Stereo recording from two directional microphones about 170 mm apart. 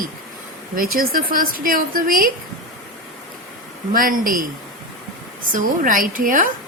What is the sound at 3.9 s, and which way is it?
Speech, 55° right (ahead or behind).